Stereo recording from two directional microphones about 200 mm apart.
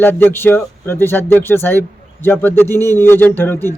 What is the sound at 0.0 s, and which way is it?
A man's voice, 10° left (ahead or behind).